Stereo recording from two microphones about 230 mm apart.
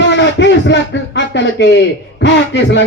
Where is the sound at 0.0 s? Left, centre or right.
Left.